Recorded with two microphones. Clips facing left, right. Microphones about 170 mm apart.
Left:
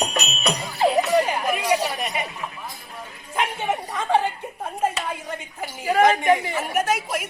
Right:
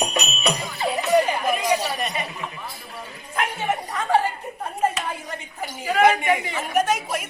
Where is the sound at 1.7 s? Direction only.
15° left (ahead or behind).